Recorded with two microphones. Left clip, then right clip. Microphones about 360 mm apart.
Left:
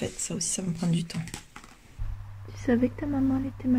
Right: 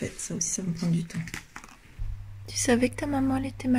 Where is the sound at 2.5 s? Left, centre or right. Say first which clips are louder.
Right 2 dB; right.